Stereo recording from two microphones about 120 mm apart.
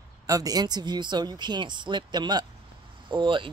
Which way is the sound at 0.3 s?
30° right (ahead or behind).